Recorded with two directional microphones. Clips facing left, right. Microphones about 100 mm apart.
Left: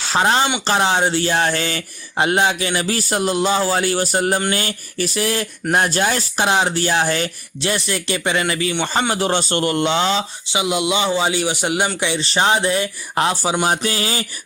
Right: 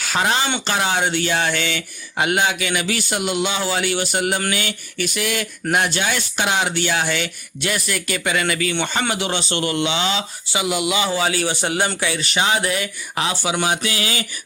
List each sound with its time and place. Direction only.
0.0 s speech: 30° left (ahead or behind)
10.4 s speech: 20° left (ahead or behind)
13.1 s speech: 40° left (ahead or behind)